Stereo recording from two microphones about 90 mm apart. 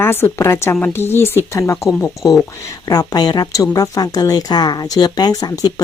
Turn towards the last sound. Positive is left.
turn(degrees=45)  # may be behind; listen again after turning